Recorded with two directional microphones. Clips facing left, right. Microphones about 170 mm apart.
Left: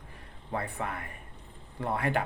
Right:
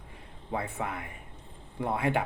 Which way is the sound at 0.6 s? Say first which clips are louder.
Right 1 dB; 15° right (ahead or behind).